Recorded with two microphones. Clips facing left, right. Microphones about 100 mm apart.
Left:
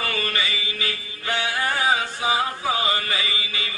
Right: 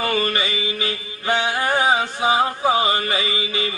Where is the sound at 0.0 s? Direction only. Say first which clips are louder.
Right 5 dB; 25° right (ahead or behind).